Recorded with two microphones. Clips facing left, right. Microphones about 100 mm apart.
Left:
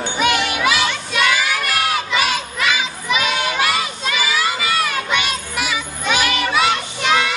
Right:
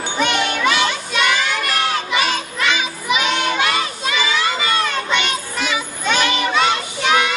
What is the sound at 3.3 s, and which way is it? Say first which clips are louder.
Children playing: right 1 dB; 5° left (ahead or behind).